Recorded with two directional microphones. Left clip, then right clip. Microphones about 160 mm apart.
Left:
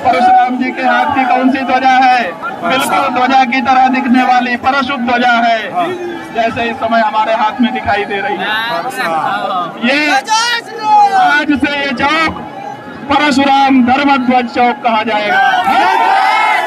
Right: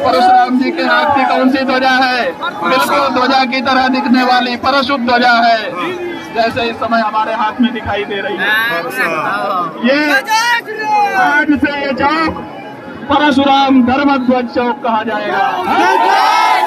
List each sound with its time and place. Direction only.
0.0 s a man's voice: 60° right (ahead or behind)
7.2 s a man's voice: 25° right (ahead or behind)
8.5 s a man's voice: 10° right (ahead or behind)
15.6 s crowd: 10° right (ahead or behind)